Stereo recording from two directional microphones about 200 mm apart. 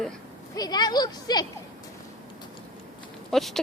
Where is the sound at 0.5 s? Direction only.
20° left (ahead or behind).